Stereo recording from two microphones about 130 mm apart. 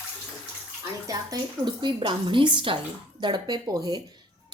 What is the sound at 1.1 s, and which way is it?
A woman's voice, 30° right (ahead or behind).